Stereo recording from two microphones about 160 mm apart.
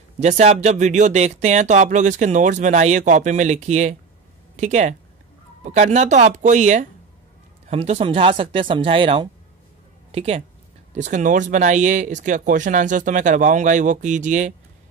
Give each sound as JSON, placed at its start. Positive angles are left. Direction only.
{"t": 0.2, "sound": "speech", "side_deg": -50}
{"t": 11.0, "sound": "speech", "side_deg": -50}